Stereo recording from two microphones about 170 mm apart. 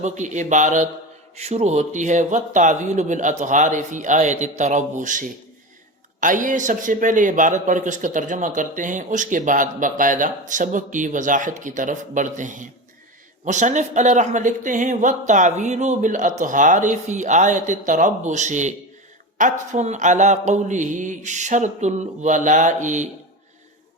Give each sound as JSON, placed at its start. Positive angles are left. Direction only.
{"t": 0.0, "sound": "a man's voice", "side_deg": -45}